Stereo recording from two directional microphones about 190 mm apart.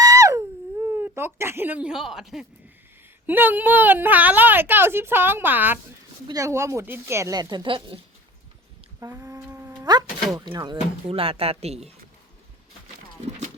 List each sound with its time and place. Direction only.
0.0 s dog: 15° right (ahead or behind)
0.9 s speech: 10° right (ahead or behind)
9.0 s a sound: 15° right (ahead or behind)
10.3 s speech: 20° right (ahead or behind)